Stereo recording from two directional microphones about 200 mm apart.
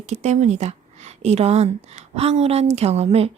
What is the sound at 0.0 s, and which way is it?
A woman's voice, 35° right (ahead or behind).